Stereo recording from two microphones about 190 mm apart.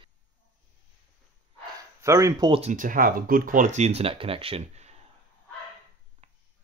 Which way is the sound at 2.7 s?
45° right (ahead or behind).